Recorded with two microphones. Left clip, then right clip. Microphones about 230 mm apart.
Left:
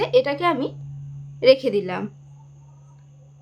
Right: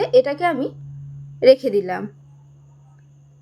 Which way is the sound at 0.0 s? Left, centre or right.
Centre.